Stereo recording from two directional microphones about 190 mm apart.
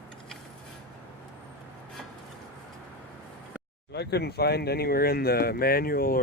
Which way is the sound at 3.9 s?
60° left (ahead or behind).